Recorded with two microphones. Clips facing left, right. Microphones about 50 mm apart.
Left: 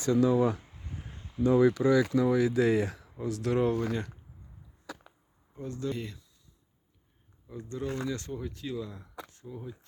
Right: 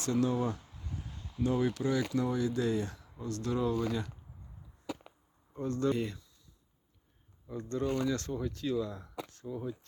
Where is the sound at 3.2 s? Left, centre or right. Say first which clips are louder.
Left 5 dB; left.